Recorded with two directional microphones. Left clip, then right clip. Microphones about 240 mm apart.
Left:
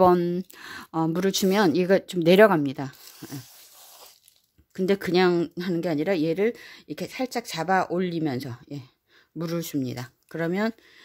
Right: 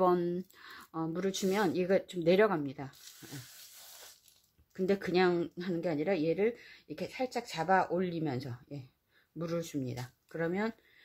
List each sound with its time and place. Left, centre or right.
0.0 s speech: left
4.7 s speech: left